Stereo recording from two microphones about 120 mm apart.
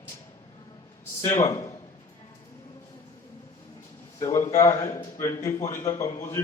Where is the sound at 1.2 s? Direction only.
25° left (ahead or behind).